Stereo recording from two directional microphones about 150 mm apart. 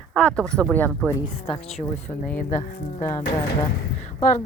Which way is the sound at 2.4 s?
60° left (ahead or behind).